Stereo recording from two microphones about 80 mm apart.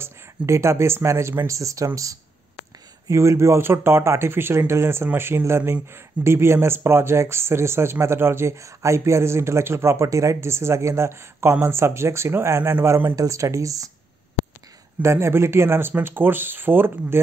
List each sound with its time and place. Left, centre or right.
0.0 s speech: right
1.5 s speech: right
3.1 s speech: right
13.1 s speech: right
15.0 s speech: right